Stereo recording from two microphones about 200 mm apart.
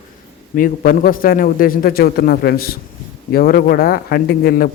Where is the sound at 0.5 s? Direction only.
45° left (ahead or behind).